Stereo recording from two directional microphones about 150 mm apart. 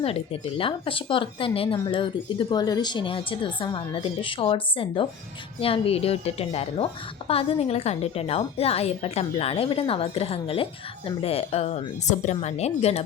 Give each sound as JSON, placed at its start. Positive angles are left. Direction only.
{"t": 0.0, "sound": "a woman's voice", "side_deg": 40}